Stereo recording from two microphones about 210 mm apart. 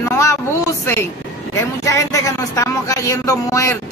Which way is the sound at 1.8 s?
15° left (ahead or behind).